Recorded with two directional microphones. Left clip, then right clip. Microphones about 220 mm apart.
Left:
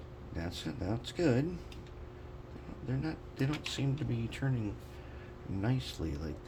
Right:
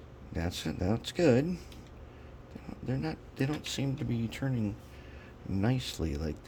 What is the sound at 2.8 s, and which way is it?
Speech, 45° right (ahead or behind).